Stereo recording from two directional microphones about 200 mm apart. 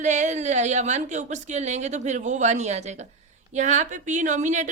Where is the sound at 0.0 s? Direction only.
35° right (ahead or behind).